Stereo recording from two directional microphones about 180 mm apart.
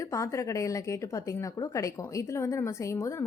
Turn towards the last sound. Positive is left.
turn(degrees=15)  # may be behind; listen again after turning